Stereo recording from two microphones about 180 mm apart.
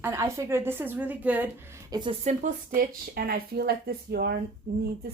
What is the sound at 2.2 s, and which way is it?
Speech, 40° right (ahead or behind).